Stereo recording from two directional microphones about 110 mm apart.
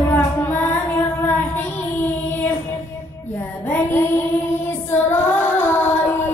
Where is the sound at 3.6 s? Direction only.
20° left (ahead or behind).